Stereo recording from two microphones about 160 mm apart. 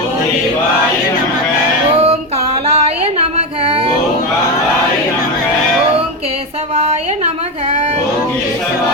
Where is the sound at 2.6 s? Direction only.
40° right (ahead or behind).